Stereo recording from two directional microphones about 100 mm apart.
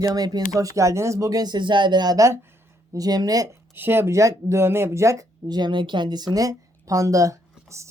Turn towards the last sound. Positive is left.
turn(degrees=-30)  # may be behind; listen again after turning